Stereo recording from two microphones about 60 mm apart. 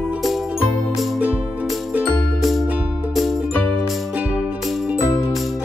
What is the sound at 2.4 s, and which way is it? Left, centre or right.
Music, centre.